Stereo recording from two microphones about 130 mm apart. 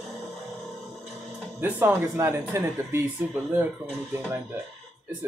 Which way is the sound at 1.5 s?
15° right (ahead or behind).